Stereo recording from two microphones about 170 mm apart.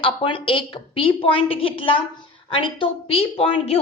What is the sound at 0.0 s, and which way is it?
A woman's voice, 30° left (ahead or behind).